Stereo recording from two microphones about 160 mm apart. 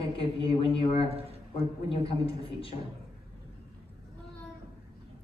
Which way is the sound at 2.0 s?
35° left (ahead or behind).